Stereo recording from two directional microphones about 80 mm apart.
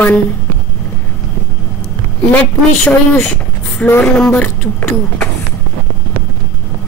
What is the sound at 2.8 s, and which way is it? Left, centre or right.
Speech, centre.